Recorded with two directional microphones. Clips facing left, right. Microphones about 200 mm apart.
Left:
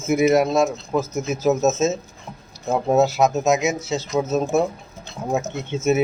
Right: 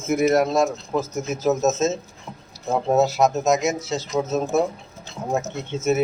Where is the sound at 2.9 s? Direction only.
Centre (ahead or behind).